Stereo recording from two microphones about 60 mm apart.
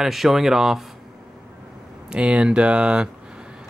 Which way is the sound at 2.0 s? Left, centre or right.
Centre.